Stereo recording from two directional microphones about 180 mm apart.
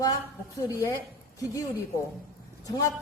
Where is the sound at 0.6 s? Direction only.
15° left (ahead or behind).